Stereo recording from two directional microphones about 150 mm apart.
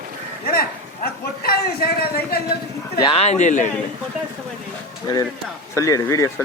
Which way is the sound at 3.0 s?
40° left (ahead or behind).